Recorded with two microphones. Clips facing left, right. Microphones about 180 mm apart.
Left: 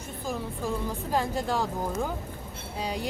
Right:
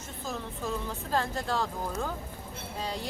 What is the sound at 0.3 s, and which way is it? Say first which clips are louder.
Speech: left 3 dB; 10° left (ahead or behind).